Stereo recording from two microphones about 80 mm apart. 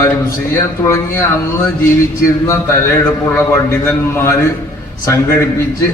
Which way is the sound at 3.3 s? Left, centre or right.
Left.